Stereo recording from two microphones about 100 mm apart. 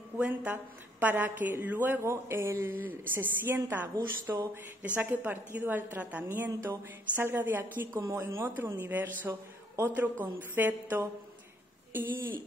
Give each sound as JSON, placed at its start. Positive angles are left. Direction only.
{"t": 0.2, "sound": "a woman's voice", "side_deg": -15}
{"t": 4.8, "sound": "a woman's voice", "side_deg": -15}